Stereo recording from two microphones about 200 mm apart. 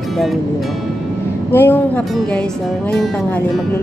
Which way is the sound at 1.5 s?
10° left (ahead or behind).